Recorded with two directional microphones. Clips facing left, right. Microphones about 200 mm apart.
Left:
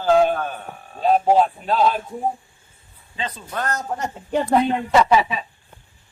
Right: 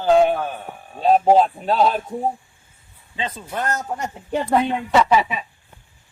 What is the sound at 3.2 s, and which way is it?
Speech, 20° right (ahead or behind).